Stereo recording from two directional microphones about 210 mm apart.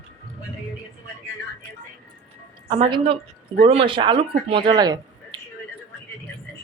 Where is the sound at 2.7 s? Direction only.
25° right (ahead or behind).